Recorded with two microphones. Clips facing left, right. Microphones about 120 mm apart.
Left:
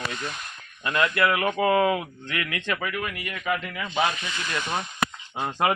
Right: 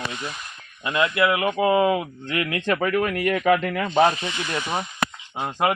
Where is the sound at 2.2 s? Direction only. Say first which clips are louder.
Right 5 dB; 30° right (ahead or behind).